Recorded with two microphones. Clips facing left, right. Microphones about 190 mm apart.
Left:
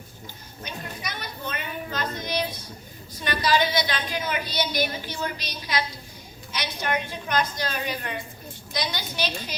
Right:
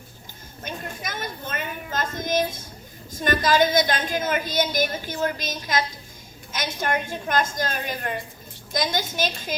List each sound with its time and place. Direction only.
0.6 s a woman's voice: 45° right (ahead or behind)